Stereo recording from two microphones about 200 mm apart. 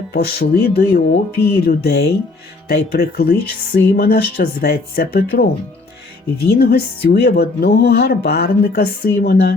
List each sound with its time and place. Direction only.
0.1 s speech: 55° left (ahead or behind)
6.5 s speech: 55° left (ahead or behind)